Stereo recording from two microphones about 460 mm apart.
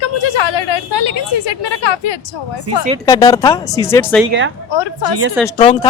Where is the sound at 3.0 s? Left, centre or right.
Centre.